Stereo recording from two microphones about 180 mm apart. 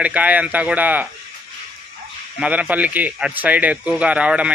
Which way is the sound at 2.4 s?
5° right (ahead or behind).